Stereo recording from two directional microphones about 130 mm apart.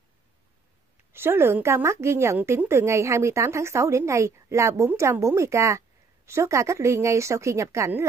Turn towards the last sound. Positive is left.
turn(degrees=-20)  # may be behind; listen again after turning